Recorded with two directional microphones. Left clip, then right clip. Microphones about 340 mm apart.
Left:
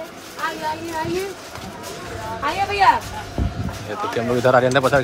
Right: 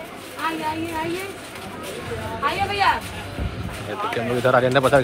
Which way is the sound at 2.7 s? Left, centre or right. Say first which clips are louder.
Left 6 dB; left.